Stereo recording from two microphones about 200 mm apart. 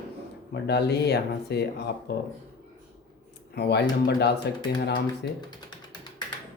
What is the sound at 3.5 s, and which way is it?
Speech, 55° left (ahead or behind).